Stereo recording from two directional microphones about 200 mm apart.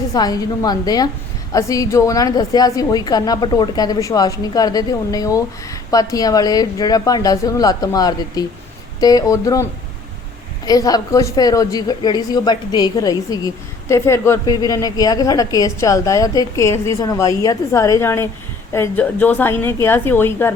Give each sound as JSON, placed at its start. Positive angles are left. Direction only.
{"t": 0.1, "sound": "a woman's voice", "side_deg": 20}
{"t": 10.7, "sound": "a woman's voice", "side_deg": 20}